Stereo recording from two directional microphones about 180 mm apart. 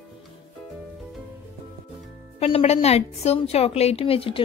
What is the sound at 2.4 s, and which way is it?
A woman's voice, 35° left (ahead or behind).